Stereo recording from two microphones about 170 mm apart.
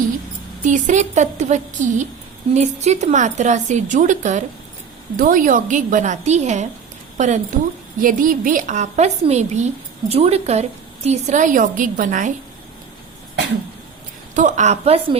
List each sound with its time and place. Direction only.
0.6 s a woman's voice: 45° right (ahead or behind)
14.3 s a woman's voice: 45° right (ahead or behind)